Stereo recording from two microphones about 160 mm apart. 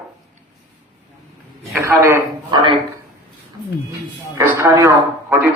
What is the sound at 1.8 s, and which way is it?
Speech, 15° right (ahead or behind).